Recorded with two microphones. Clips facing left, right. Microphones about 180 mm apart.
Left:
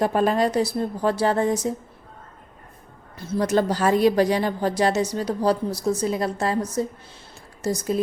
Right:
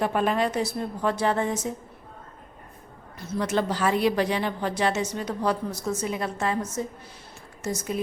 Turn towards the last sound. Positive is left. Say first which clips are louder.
# left 5 dB
turn(degrees=35)  # may be behind; listen again after turning